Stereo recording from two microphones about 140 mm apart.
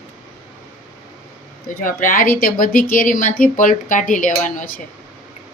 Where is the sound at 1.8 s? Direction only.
75° left (ahead or behind).